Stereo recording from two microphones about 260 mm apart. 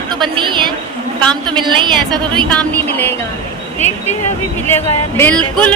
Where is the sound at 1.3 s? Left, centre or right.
Centre.